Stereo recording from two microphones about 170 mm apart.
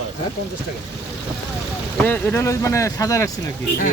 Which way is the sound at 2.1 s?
10° left (ahead or behind).